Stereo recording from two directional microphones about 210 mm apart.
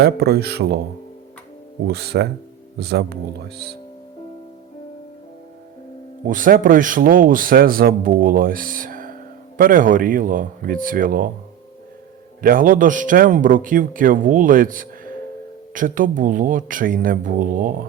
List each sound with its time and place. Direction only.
0.0 s speech: 50° right (ahead or behind)
1.9 s speech: 50° right (ahead or behind)
6.2 s speech: 40° right (ahead or behind)
12.4 s speech: 40° right (ahead or behind)